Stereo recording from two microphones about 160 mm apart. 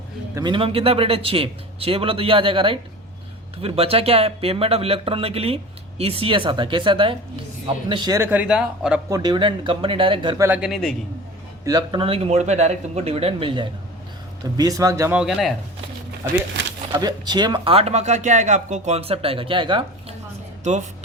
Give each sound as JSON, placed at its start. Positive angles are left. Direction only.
{"t": 0.3, "sound": "speech", "side_deg": -30}
{"t": 8.3, "sound": "a man's voice", "side_deg": -5}
{"t": 9.0, "sound": "speech", "side_deg": -25}
{"t": 10.3, "sound": "a man's voice", "side_deg": -15}
{"t": 10.6, "sound": "speech", "side_deg": 0}
{"t": 11.6, "sound": "speech", "side_deg": -25}
{"t": 14.5, "sound": "speech", "side_deg": -20}
{"t": 15.2, "sound": "speech", "side_deg": 0}
{"t": 16.9, "sound": "speech", "side_deg": -25}